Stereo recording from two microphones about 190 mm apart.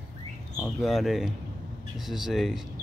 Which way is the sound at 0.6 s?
Centre (ahead or behind).